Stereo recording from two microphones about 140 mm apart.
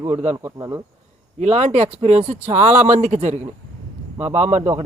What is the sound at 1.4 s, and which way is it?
Speech, 50° right (ahead or behind).